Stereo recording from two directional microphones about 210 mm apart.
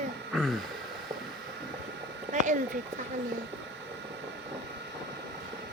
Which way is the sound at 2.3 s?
35° right (ahead or behind).